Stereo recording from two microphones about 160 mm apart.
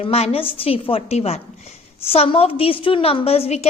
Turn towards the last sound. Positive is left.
turn(degrees=40)  # may be behind; listen again after turning